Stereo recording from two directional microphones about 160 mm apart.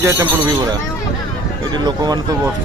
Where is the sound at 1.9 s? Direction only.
25° right (ahead or behind).